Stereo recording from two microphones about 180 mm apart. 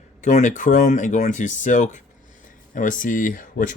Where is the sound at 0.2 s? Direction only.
40° left (ahead or behind).